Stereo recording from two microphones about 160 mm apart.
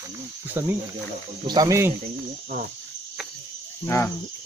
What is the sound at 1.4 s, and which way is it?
Speech, 25° right (ahead or behind).